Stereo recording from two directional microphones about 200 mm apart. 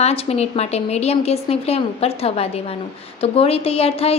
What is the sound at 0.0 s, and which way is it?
A woman's voice, 30° left (ahead or behind).